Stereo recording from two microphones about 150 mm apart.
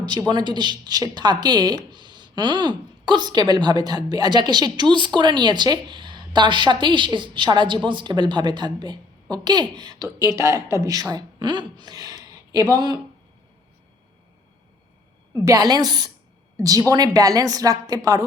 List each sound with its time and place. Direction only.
0.0 s a woman's voice: 30° right (ahead or behind)
15.4 s a woman's voice: 25° right (ahead or behind)